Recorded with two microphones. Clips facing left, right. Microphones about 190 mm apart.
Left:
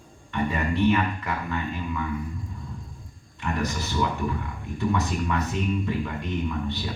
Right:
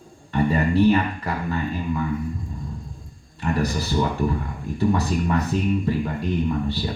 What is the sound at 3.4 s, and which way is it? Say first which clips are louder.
Speech: right 5 dB; 35° right (ahead or behind).